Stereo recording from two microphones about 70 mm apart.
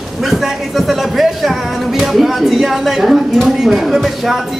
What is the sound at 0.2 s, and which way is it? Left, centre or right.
Speech, centre.